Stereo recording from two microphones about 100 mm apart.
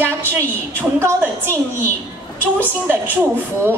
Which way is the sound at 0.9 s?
25° right (ahead or behind).